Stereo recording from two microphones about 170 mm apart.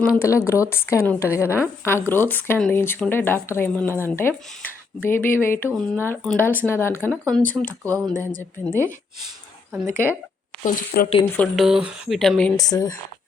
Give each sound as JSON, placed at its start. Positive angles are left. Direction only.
{"t": 0.0, "sound": "a woman's voice", "side_deg": 15}
{"t": 7.7, "sound": "speech", "side_deg": -20}
{"t": 8.6, "sound": "a woman's voice", "side_deg": 15}
{"t": 9.8, "sound": "speech", "side_deg": -15}
{"t": 10.6, "sound": "speech", "side_deg": 55}
{"t": 11.3, "sound": "speech", "side_deg": 0}
{"t": 12.5, "sound": "speech", "side_deg": 20}